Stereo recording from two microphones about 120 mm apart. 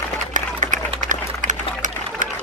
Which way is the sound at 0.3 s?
90° right.